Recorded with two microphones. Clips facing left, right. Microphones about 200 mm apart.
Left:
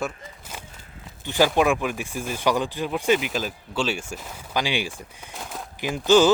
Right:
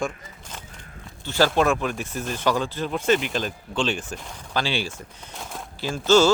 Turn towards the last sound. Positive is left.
turn(degrees=15)  # may be behind; listen again after turning